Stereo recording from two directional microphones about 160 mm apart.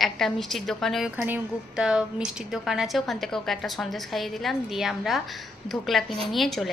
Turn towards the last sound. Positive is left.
turn(degrees=0)  # may be behind; listen again after turning